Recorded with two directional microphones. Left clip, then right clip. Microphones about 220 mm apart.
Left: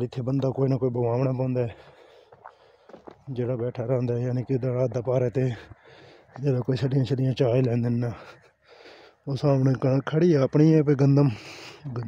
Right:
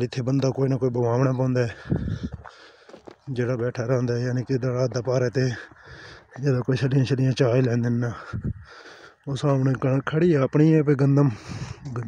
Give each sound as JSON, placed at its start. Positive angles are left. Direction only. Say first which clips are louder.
{"t": 0.0, "sound": "speech", "louder": "right 3 dB", "side_deg": -5}
{"t": 3.3, "sound": "speech", "louder": "right 3 dB", "side_deg": -5}
{"t": 11.8, "sound": "speech", "louder": "right 2 dB", "side_deg": -30}